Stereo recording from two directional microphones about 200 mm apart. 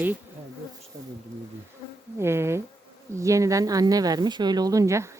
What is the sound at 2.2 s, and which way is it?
A woman's voice, 10° right (ahead or behind).